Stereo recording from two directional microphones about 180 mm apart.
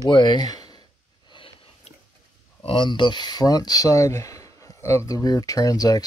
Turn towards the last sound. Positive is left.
turn(degrees=20)  # may be behind; listen again after turning